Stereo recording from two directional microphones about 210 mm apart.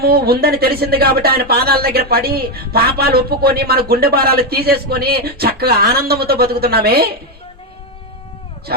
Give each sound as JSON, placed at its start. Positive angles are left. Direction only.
{"t": 0.0, "sound": "speech", "side_deg": -45}